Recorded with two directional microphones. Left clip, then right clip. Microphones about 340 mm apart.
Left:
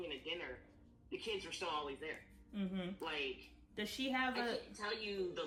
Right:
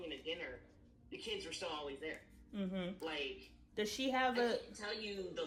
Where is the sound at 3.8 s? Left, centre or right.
Centre.